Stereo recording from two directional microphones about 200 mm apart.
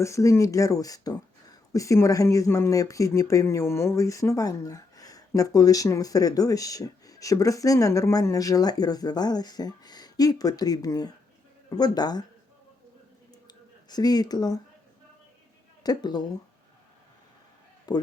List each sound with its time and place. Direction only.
0.0 s speech: 15° left (ahead or behind)
13.8 s speech: 20° left (ahead or behind)
15.8 s speech: 20° left (ahead or behind)
17.9 s speech: 20° left (ahead or behind)